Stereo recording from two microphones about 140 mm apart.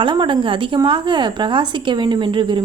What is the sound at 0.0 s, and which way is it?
A woman's voice, 35° right (ahead or behind).